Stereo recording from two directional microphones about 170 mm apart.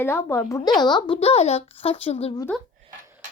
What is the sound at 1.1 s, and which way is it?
A child's voice, 35° left (ahead or behind).